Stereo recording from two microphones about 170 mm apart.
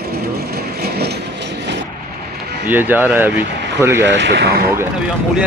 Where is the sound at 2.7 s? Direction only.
10° right (ahead or behind).